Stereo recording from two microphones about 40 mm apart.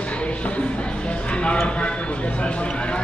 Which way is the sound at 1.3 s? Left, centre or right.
Left.